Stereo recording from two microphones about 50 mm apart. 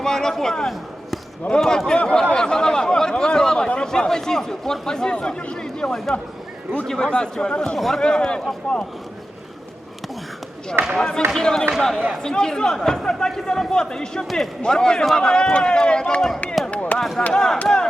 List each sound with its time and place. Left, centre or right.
0.0 s a man's voice: centre
7.8 s a man's voice: centre
8.0 s a man's voice: centre
10.9 s a man's voice: centre
14.3 s a man's voice: centre
14.6 s a man's voice: centre
16.7 s a sound: left
17.3 s a man's voice: centre